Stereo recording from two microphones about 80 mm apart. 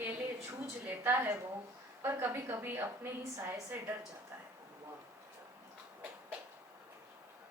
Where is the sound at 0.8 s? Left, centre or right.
Right.